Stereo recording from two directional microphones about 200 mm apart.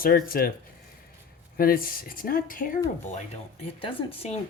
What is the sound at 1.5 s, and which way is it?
Speech, 45° left (ahead or behind).